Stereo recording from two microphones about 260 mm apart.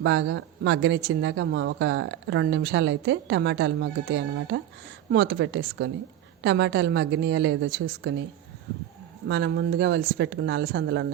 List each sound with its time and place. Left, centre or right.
0.0 s a woman's voice: right
9.2 s speech: right